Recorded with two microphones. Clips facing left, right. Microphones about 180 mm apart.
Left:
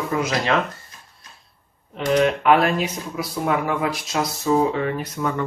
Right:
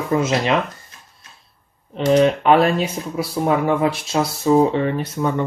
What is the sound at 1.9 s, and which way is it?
Speech, 25° right (ahead or behind).